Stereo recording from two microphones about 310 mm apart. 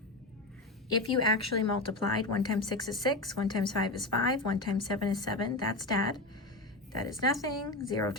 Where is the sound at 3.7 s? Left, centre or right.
Left.